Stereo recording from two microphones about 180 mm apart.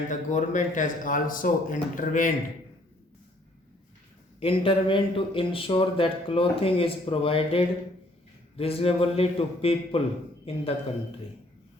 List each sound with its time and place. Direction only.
0.1 s speech: 45° left (ahead or behind)
4.4 s speech: 30° left (ahead or behind)